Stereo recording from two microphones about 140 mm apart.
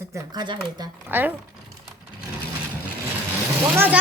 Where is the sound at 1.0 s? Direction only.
15° right (ahead or behind).